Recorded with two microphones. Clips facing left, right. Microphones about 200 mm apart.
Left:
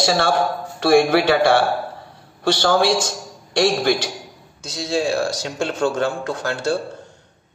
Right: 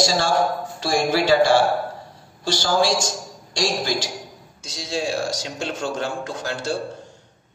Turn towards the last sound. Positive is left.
turn(degrees=60)  # may be behind; listen again after turning